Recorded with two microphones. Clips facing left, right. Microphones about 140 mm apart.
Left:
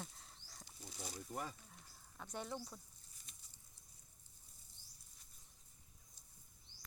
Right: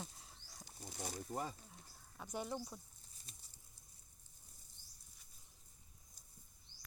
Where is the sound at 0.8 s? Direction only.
50° right (ahead or behind).